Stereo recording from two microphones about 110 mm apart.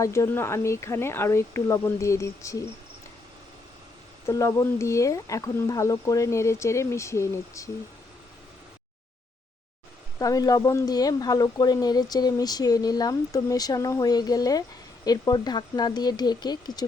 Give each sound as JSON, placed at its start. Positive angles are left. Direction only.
{"t": 0.0, "sound": "speech", "side_deg": 25}
{"t": 4.3, "sound": "speech", "side_deg": 30}
{"t": 10.2, "sound": "speech", "side_deg": 35}